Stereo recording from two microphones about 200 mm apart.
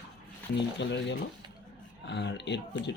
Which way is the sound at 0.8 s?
60° left (ahead or behind).